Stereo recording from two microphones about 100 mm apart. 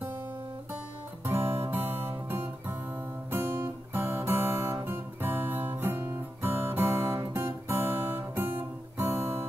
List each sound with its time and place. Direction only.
1.2 s music: 25° right (ahead or behind)
4.8 s guitar: 25° right (ahead or behind)